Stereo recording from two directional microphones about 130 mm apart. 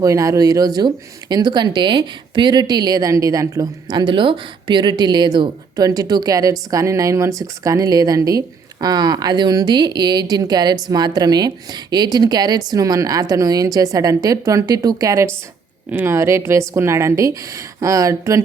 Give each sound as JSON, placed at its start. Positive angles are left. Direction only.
{"t": 0.0, "sound": "speech", "side_deg": -25}